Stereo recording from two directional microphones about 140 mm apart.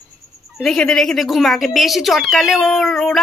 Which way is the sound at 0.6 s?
5° left (ahead or behind).